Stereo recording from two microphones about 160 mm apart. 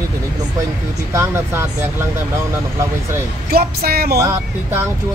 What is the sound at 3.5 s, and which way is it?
Speech, 75° right (ahead or behind).